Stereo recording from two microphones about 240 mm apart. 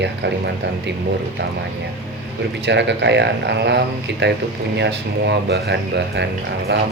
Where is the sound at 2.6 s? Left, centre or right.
Right.